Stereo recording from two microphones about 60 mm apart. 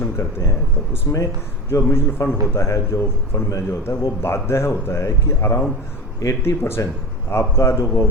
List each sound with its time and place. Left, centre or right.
0.2 s speech: left
1.1 s a man's voice: left
3.8 s a man's voice: left